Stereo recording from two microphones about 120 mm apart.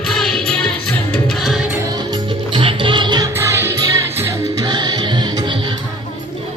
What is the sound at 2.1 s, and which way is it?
Music, 45° right (ahead or behind).